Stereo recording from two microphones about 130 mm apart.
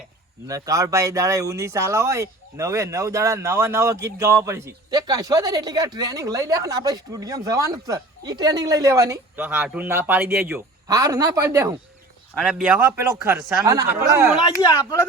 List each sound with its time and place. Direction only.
0.4 s speech: 25° right (ahead or behind)
9.3 s a man's voice: 15° right (ahead or behind)
10.8 s speech: 25° right (ahead or behind)
12.4 s a man's voice: 5° right (ahead or behind)